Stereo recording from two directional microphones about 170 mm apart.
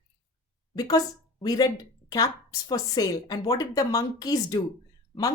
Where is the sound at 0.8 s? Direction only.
20° left (ahead or behind).